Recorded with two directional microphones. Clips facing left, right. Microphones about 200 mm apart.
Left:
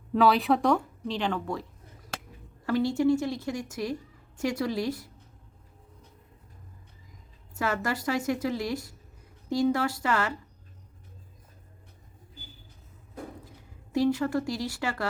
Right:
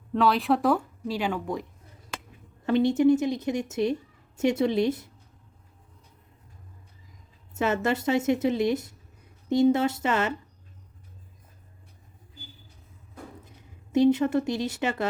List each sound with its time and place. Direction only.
0.1 s speech: centre (ahead or behind)
2.6 s a woman's voice: 20° right (ahead or behind)
7.5 s a woman's voice: 25° right (ahead or behind)
13.4 s a woman's voice: 20° right (ahead or behind)